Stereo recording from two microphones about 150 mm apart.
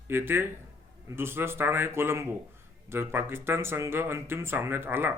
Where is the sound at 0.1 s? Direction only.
15° right (ahead or behind).